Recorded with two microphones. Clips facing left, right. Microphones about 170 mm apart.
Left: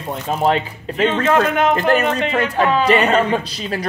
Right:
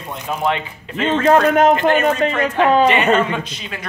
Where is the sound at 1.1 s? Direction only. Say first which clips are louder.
Right 6 dB; 35° right (ahead or behind).